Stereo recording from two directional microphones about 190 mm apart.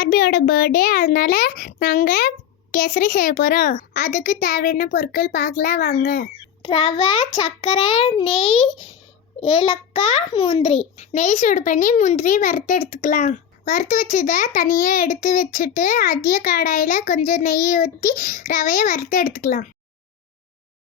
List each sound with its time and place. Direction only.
0.0 s a child's voice: 50° left (ahead or behind)
6.6 s a child's voice: 25° left (ahead or behind); by 19.6 s 45° left (ahead or behind)